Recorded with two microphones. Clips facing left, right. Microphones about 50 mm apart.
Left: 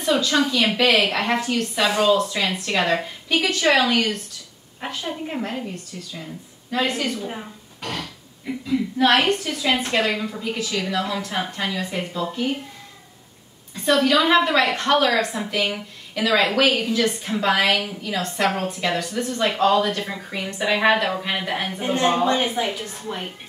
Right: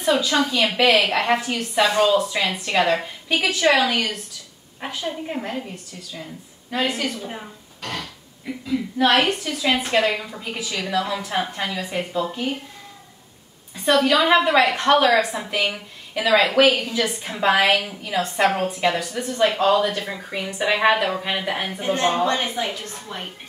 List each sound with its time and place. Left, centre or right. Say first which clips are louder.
0.0 s a woman's voice: even; centre
4.7 s speech: right 1 dB; centre
6.7 s a woman's voice: left 1 dB; centre
7.2 s a woman's voice: left 2 dB; centre
13.7 s a woman's voice: even; centre
21.8 s a woman's voice: left 1 dB; centre